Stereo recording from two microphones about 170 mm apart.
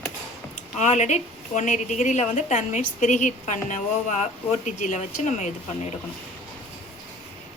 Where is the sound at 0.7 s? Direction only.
45° left (ahead or behind).